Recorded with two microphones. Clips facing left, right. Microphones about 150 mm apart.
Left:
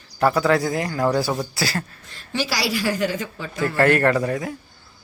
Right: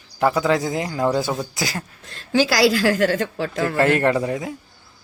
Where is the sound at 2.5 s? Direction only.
90° right.